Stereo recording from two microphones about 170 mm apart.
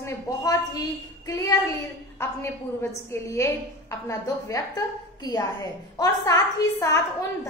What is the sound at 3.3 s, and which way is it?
A woman's voice, 15° left (ahead or behind).